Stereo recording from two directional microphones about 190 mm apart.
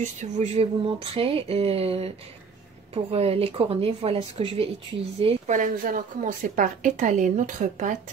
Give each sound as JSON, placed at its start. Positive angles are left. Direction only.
{"t": 0.2, "sound": "speech", "side_deg": -35}
{"t": 5.2, "sound": "a woman's voice", "side_deg": -45}